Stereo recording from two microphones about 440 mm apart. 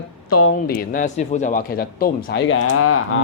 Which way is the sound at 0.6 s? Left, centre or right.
Centre.